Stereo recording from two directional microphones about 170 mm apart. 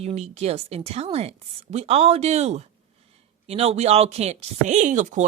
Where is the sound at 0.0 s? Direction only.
40° right (ahead or behind).